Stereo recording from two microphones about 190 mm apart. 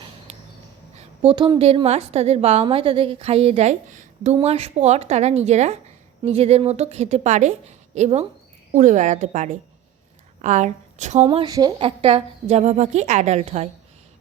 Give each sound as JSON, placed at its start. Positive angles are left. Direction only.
{"t": 0.3, "sound": "a sound", "side_deg": -35}
{"t": 0.9, "sound": "a woman's voice", "side_deg": -30}
{"t": 11.2, "sound": "a woman's voice", "side_deg": -20}